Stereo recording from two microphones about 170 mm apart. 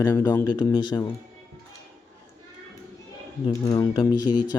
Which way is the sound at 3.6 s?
25° left (ahead or behind).